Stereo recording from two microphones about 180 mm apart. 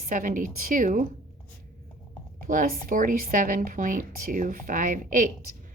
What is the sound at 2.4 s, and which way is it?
A woman's voice, 50° right (ahead or behind).